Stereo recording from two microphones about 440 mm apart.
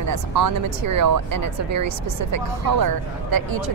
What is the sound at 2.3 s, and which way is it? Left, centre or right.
Speech, right.